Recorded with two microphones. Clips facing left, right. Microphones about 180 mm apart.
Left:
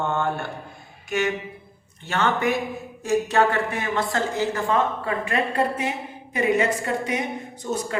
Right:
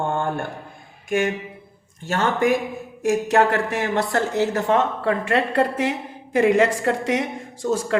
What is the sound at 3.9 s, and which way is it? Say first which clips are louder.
A woman's voice: right 2 dB; 65° right (ahead or behind).